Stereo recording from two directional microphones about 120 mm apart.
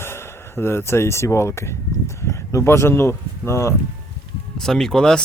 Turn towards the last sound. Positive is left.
turn(degrees=5)  # may be behind; listen again after turning